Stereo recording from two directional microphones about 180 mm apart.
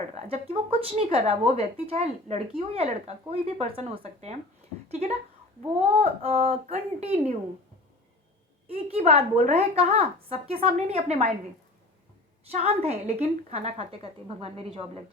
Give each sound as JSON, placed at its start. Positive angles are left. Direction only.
{"t": 0.1, "sound": "speech", "side_deg": -35}
{"t": 8.7, "sound": "speech", "side_deg": -35}
{"t": 12.5, "sound": "speech", "side_deg": -35}